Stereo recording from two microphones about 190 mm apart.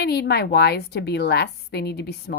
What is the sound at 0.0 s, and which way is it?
Speech, 60° left (ahead or behind).